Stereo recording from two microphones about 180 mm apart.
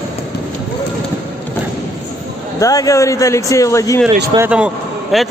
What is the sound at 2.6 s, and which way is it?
Speech, 20° left (ahead or behind).